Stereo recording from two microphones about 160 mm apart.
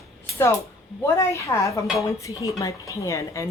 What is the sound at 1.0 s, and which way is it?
A woman's voice, 15° left (ahead or behind).